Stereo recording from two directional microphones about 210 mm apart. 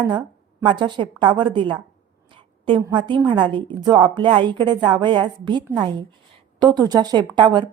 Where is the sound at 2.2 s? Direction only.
25° right (ahead or behind).